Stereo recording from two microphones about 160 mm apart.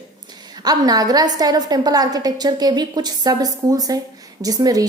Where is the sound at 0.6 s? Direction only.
25° right (ahead or behind).